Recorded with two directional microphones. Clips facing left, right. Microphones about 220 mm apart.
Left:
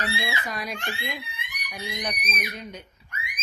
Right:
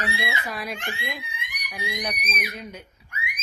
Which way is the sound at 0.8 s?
20° right (ahead or behind).